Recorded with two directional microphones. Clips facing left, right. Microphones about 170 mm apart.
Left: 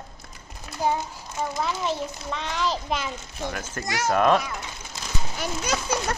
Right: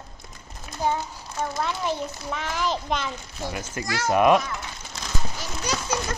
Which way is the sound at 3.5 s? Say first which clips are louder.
Right 2 dB; 10° right (ahead or behind).